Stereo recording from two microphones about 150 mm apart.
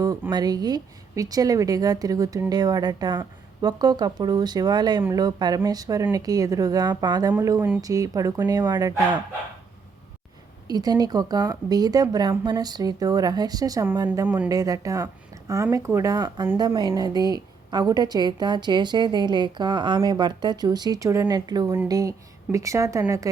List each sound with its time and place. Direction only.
0.0 s a woman's voice: 25° right (ahead or behind)
10.7 s a woman's voice: 25° right (ahead or behind)
14.3 s speech: 10° right (ahead or behind)
14.5 s a woman's voice: 25° right (ahead or behind)